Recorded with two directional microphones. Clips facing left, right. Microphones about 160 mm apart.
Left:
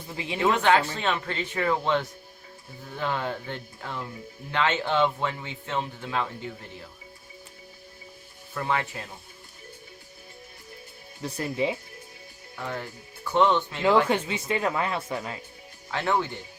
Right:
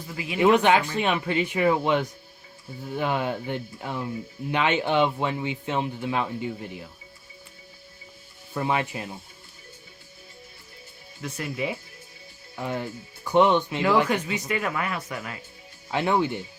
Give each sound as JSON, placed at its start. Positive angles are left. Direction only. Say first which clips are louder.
{"t": 0.1, "sound": "speech", "louder": "left 1 dB", "side_deg": 25}
{"t": 0.3, "sound": "speech", "louder": "right 3 dB", "side_deg": -15}
{"t": 8.5, "sound": "speech", "louder": "right 2 dB", "side_deg": -20}
{"t": 11.2, "sound": "speech", "louder": "left 2 dB", "side_deg": 35}
{"t": 12.5, "sound": "speech", "louder": "right 4 dB", "side_deg": -20}
{"t": 14.1, "sound": "speech", "louder": "even", "side_deg": 25}
{"t": 15.9, "sound": "speech", "louder": "right 3 dB", "side_deg": -15}